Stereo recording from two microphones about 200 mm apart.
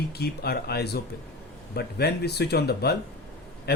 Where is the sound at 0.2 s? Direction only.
50° left (ahead or behind).